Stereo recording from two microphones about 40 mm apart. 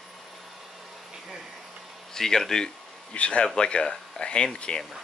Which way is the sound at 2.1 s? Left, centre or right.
Centre.